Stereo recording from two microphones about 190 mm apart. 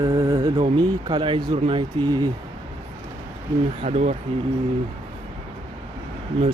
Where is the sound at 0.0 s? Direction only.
20° right (ahead or behind).